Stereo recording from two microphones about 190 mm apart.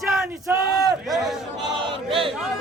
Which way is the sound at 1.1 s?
Centre (ahead or behind).